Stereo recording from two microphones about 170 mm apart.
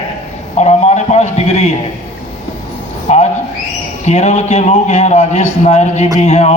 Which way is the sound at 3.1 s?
40° left (ahead or behind).